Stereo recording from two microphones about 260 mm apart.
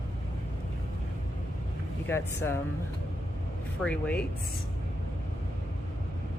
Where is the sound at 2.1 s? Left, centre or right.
Centre.